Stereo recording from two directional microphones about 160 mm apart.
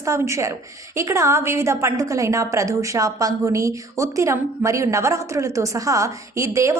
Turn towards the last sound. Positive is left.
turn(degrees=-20)  # may be behind; listen again after turning